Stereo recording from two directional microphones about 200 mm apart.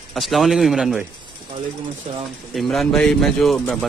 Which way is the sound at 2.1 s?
35° right (ahead or behind).